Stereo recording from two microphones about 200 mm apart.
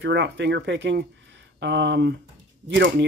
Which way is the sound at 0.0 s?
60° right (ahead or behind).